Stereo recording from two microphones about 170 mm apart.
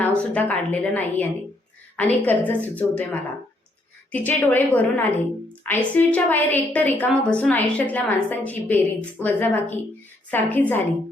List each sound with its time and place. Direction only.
0.2 s a woman's voice: 10° left (ahead or behind)